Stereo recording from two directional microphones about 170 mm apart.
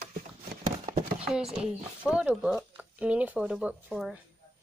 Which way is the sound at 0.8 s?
40° right (ahead or behind).